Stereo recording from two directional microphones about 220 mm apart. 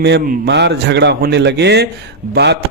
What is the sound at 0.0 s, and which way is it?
Speech, 50° right (ahead or behind).